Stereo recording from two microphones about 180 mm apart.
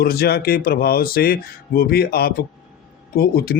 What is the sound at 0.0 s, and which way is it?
Speech, 60° left (ahead or behind).